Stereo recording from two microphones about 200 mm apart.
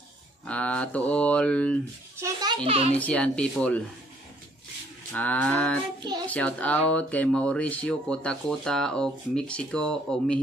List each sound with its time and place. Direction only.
0.5 s speech: 5° left (ahead or behind)
2.1 s a sound: 15° right (ahead or behind)
2.6 s a child's voice: 30° right (ahead or behind)
3.0 s speech: 5° left (ahead or behind)
5.1 s a sound: 5° left (ahead or behind)
6.2 s speech: 5° left (ahead or behind)